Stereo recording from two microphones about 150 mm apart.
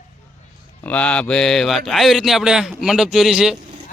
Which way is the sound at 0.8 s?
10° left (ahead or behind).